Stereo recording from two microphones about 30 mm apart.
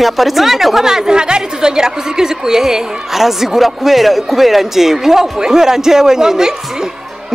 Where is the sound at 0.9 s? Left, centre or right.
Right.